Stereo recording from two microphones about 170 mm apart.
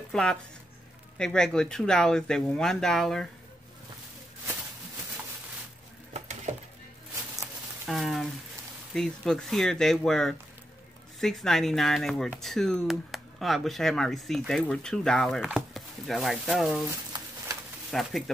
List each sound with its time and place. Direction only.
0.1 s speech: 5° left (ahead or behind)
6.1 s a sound: 45° right (ahead or behind)
7.8 s speech: centre (ahead or behind)
17.9 s speech: centre (ahead or behind)